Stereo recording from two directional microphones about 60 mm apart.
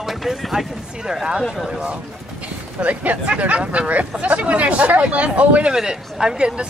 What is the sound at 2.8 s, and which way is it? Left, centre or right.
Speech, right.